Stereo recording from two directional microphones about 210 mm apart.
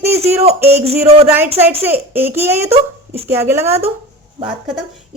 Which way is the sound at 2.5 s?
30° right (ahead or behind).